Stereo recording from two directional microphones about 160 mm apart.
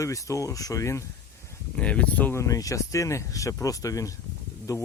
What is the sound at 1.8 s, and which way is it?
Speech, 10° left (ahead or behind).